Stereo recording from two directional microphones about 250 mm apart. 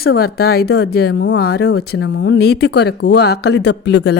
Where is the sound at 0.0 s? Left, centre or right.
Left.